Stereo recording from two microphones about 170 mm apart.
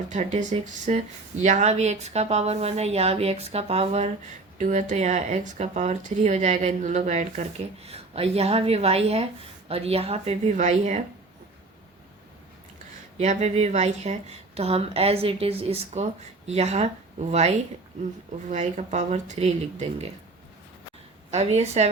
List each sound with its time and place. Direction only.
0.1 s speech: 45° right (ahead or behind)
13.1 s speech: 40° right (ahead or behind)
18.5 s speech: 45° right (ahead or behind)
21.2 s a woman's voice: 40° right (ahead or behind)